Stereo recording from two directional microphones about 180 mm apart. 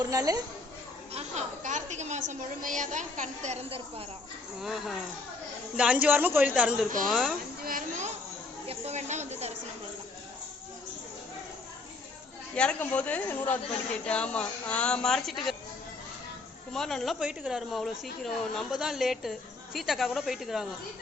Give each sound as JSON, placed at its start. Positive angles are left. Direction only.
{"t": 0.0, "sound": "a woman's voice", "side_deg": -20}
{"t": 1.1, "sound": "a woman's voice", "side_deg": -40}
{"t": 4.6, "sound": "a man's voice", "side_deg": 0}
{"t": 7.6, "sound": "a woman's voice", "side_deg": -50}
{"t": 12.5, "sound": "speech", "side_deg": 5}
{"t": 16.7, "sound": "speech", "side_deg": 0}